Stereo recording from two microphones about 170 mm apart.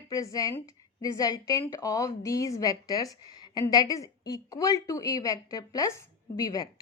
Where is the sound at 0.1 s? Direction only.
20° left (ahead or behind).